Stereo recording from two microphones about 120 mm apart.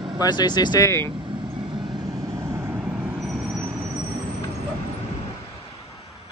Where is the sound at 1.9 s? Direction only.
Centre (ahead or behind).